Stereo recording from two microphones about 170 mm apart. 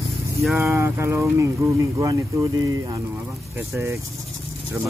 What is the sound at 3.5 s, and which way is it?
Speech, 15° right (ahead or behind).